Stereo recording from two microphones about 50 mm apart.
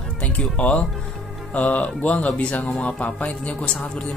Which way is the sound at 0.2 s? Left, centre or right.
Left.